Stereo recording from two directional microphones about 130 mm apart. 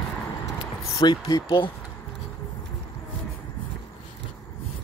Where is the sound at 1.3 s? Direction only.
35° left (ahead or behind).